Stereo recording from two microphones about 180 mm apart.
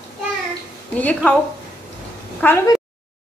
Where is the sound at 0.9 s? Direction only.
10° left (ahead or behind).